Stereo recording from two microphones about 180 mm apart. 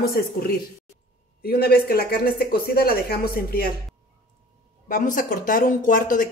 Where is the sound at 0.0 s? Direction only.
55° left (ahead or behind).